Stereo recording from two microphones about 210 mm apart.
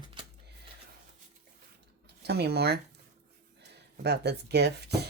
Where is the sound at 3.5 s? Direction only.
55° right (ahead or behind).